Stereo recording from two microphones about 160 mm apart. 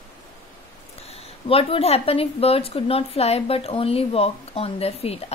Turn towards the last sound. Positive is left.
turn(degrees=40)  # may be behind; listen again after turning